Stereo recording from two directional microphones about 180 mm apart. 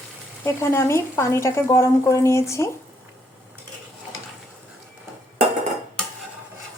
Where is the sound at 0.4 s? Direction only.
15° left (ahead or behind).